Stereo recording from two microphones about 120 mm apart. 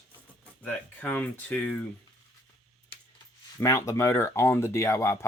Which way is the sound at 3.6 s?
25° left (ahead or behind).